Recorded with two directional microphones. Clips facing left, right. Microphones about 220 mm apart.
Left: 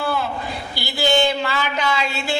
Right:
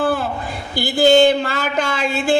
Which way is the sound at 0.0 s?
50° right (ahead or behind).